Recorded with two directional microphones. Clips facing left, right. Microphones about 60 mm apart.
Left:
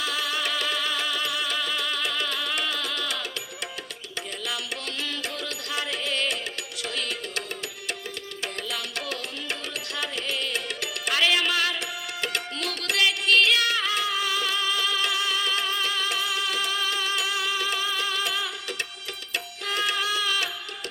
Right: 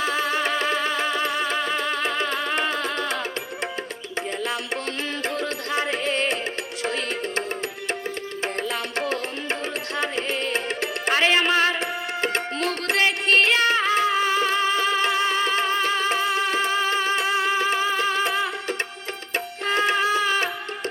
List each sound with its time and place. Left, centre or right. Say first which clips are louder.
0.0 s music: right 5 dB; right
5.2 s music: right 7 dB; right
8.7 s music: right 6 dB; right